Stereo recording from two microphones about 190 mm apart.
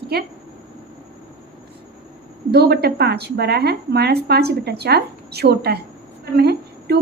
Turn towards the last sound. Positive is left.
turn(degrees=-60)  # may be behind; listen again after turning